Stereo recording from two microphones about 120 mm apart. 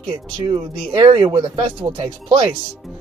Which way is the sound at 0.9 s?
45° right (ahead or behind).